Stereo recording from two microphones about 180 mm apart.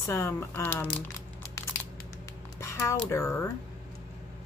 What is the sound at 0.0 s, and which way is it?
Speech, 15° left (ahead or behind).